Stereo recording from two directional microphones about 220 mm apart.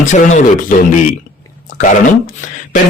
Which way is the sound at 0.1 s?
35° left (ahead or behind).